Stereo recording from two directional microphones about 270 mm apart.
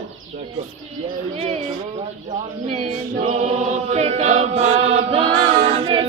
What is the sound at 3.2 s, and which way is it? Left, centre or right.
Chant, right.